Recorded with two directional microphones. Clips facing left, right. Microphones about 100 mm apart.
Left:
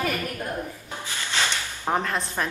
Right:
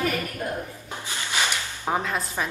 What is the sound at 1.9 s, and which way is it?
Speech, 5° right (ahead or behind).